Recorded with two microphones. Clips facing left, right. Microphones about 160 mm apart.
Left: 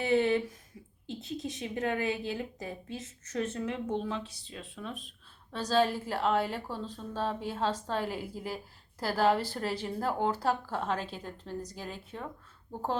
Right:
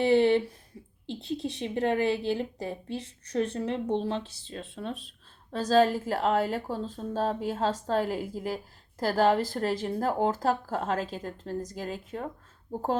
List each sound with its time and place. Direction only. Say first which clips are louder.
0.0 s a woman's voice: right 5 dB; 30° right (ahead or behind)